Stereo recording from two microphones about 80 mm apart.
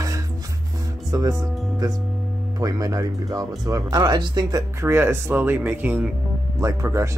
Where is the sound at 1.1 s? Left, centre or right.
Right.